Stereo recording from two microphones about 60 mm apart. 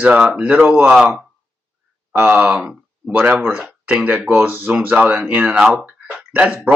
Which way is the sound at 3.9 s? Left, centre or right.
Right.